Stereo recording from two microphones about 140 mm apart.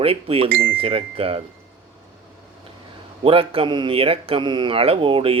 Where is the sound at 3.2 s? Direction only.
40° right (ahead or behind).